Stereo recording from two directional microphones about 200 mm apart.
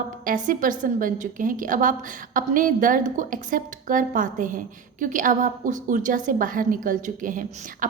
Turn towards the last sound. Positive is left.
turn(degrees=-40)  # may be behind; listen again after turning